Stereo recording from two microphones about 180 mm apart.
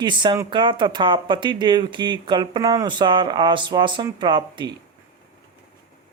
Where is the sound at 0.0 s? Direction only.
25° right (ahead or behind).